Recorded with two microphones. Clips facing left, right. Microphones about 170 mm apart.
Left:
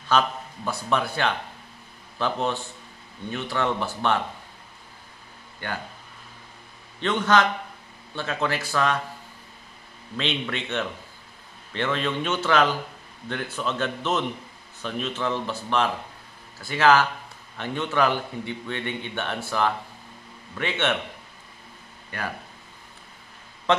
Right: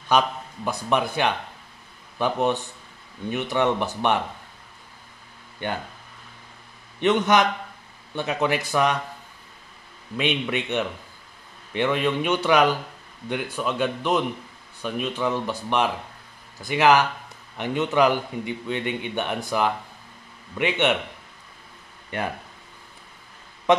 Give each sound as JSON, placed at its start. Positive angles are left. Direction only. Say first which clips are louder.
{"t": 0.1, "sound": "a man's voice", "louder": "right 2 dB", "side_deg": -15}
{"t": 5.6, "sound": "speech", "louder": "right 4 dB", "side_deg": -20}
{"t": 7.0, "sound": "a man's voice", "louder": "right 2 dB", "side_deg": -15}
{"t": 10.1, "sound": "a man's voice", "louder": "right 4 dB", "side_deg": -15}
{"t": 22.1, "sound": "speech", "louder": "right 5 dB", "side_deg": -25}